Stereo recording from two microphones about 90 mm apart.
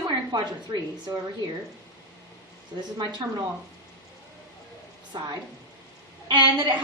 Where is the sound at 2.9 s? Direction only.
55° right (ahead or behind).